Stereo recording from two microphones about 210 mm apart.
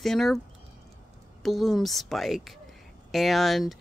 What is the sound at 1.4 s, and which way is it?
Speech, centre (ahead or behind).